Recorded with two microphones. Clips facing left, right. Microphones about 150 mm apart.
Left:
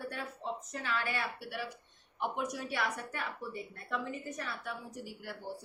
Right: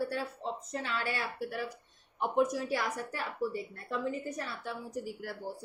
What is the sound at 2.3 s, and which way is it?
A woman's voice, 30° right (ahead or behind).